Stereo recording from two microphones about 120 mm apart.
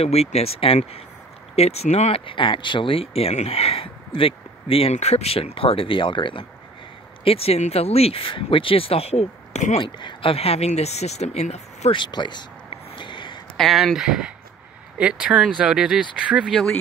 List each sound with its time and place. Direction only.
0.0 s speech: 60° left (ahead or behind)
4.9 s speech: 60° left (ahead or behind); by 6.4 s 45° left (ahead or behind)
7.2 s speech: 55° left (ahead or behind); by 9.8 s 70° left (ahead or behind)
9.8 s speech: 40° left (ahead or behind); by 11.9 s 65° left (ahead or behind)
11.9 s speech: 40° left (ahead or behind)
12.9 s a sound: 40° left (ahead or behind)
13.6 s speech: centre (ahead or behind)